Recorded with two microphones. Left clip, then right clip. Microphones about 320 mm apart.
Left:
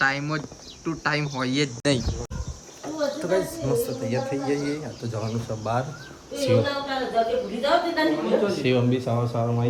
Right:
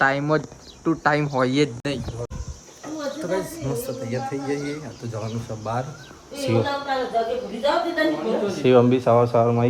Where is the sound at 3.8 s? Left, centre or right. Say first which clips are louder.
Left 2 dB; centre.